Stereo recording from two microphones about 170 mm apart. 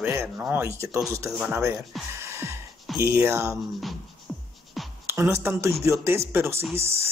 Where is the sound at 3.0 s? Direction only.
15° right (ahead or behind).